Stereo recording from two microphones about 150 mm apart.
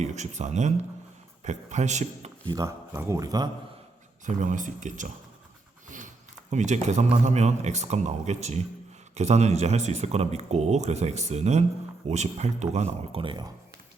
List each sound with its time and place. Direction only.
0.0 s speech: 50° right (ahead or behind)
2.5 s speech: 20° right (ahead or behind)
4.3 s speech: 55° right (ahead or behind)
6.5 s speech: 50° right (ahead or behind); by 13.5 s 30° right (ahead or behind)